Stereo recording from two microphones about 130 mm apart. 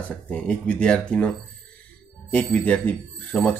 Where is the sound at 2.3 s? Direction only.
10° left (ahead or behind).